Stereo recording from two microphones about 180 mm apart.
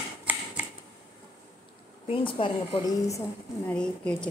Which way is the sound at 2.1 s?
30° left (ahead or behind).